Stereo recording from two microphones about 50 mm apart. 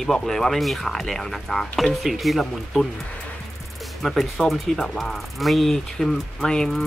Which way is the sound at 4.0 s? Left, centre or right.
Centre.